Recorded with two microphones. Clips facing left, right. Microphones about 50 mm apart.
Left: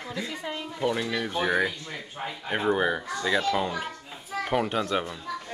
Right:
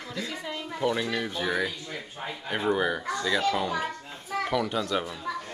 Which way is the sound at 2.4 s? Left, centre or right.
Centre.